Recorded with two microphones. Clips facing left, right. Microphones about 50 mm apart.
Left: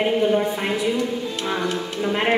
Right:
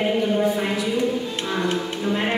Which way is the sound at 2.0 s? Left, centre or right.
Left.